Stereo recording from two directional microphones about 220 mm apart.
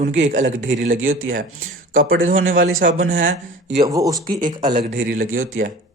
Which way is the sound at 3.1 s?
40° right (ahead or behind).